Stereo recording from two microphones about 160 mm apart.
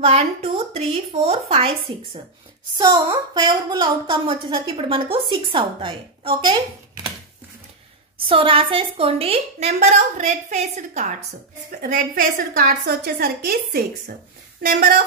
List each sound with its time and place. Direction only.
0.0 s a woman's voice: 40° right (ahead or behind)
2.8 s a woman's voice: 25° right (ahead or behind)
8.2 s a woman's voice: 35° right (ahead or behind)
11.7 s a woman's voice: 60° right (ahead or behind)